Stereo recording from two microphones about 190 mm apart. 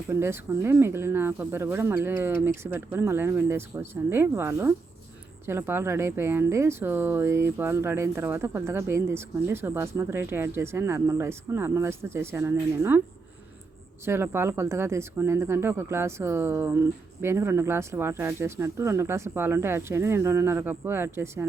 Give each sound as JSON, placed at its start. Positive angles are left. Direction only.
{"t": 0.1, "sound": "speech", "side_deg": -15}
{"t": 14.0, "sound": "speech", "side_deg": -15}